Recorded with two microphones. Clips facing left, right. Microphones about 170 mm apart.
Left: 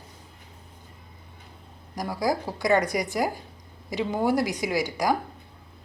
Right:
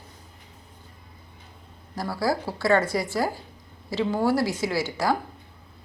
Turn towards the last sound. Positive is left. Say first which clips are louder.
# even
turn(degrees=15)  # may be behind; listen again after turning